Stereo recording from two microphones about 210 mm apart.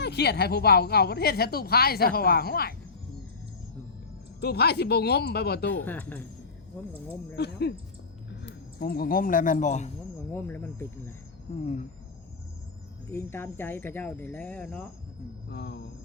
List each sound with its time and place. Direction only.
0.0 s speech: 50° left (ahead or behind)
4.4 s speech: 50° left (ahead or behind)
5.8 s speech: 10° left (ahead or behind)
7.3 s speech: 50° left (ahead or behind); by 9.9 s 35° left (ahead or behind)
10.3 s speech: 10° left (ahead or behind)
11.5 s speech: 25° left (ahead or behind)
13.1 s speech: 10° left (ahead or behind)
15.4 s speech: 55° left (ahead or behind)